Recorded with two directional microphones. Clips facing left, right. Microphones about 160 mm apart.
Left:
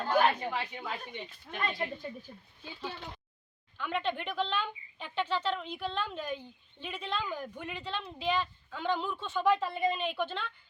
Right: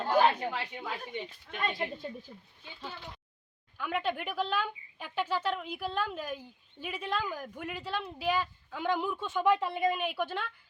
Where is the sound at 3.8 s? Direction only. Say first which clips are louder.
Right 1 dB; 10° right (ahead or behind).